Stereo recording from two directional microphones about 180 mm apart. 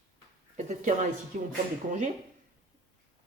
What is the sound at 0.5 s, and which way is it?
Speech, 40° right (ahead or behind).